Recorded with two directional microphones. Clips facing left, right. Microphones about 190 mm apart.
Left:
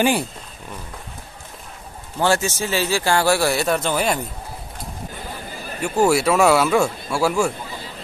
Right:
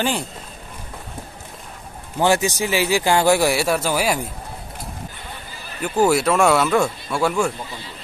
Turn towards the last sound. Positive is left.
turn(degrees=0)  # may be behind; listen again after turning